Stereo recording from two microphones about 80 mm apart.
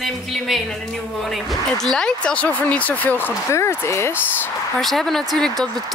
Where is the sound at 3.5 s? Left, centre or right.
Left.